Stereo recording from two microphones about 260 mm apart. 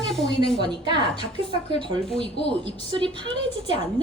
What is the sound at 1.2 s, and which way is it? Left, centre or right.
Speech, left.